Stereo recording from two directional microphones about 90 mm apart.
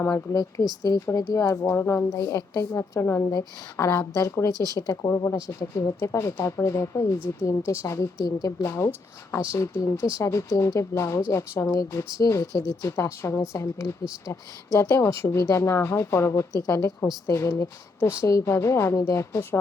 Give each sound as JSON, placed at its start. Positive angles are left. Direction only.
{"t": 0.0, "sound": "a woman's voice", "side_deg": 40}
{"t": 1.7, "sound": "a woman's voice", "side_deg": 25}
{"t": 2.1, "sound": "a woman's voice", "side_deg": 45}